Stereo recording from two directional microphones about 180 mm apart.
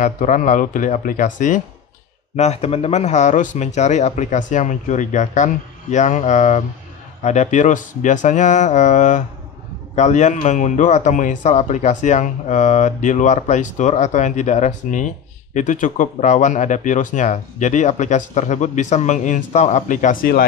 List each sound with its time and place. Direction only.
0.0 s speech: 45° left (ahead or behind)